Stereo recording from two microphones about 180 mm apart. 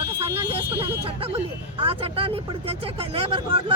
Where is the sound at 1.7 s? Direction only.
30° right (ahead or behind).